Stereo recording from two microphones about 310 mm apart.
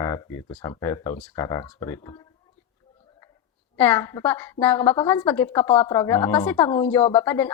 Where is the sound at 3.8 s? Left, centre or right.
Centre.